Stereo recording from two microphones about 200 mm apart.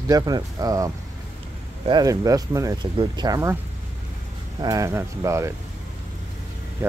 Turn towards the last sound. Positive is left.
turn(degrees=-10)  # may be behind; listen again after turning